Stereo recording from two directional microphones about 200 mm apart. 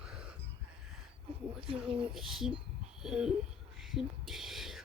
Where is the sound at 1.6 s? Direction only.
25° right (ahead or behind).